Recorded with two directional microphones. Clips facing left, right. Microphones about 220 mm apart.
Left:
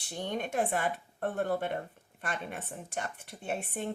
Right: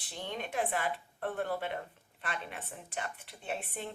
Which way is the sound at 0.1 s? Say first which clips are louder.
Left 5 dB; 45° left (ahead or behind).